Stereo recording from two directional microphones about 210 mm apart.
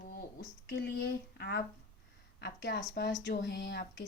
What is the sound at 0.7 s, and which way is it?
A woman's voice, 50° left (ahead or behind).